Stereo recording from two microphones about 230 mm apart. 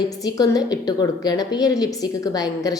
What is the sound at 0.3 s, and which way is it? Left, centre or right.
A woman's voice, centre.